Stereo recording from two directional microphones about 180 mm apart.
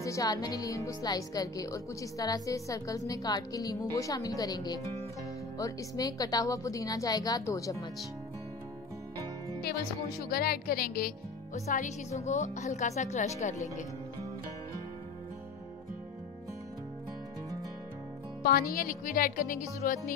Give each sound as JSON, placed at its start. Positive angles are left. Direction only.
{"t": 0.0, "sound": "speech", "side_deg": 20}
{"t": 10.3, "sound": "speech", "side_deg": 55}
{"t": 18.4, "sound": "speech", "side_deg": 55}